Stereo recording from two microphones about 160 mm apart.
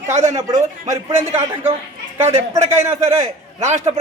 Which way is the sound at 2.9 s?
40° right (ahead or behind).